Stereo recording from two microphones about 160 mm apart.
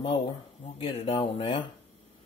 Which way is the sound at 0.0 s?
35° left (ahead or behind).